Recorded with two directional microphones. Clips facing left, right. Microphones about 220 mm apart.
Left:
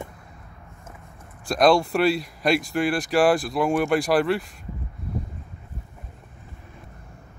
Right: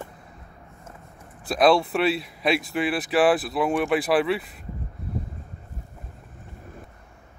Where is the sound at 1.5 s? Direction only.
5° right (ahead or behind).